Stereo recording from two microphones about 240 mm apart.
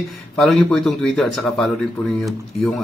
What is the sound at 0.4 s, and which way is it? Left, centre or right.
A man's voice, centre.